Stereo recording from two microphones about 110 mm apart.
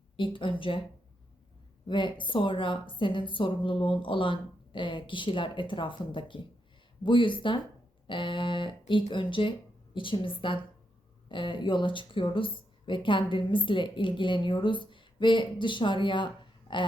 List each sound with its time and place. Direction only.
0.2 s speech: 50° left (ahead or behind)
1.9 s speech: 45° left (ahead or behind)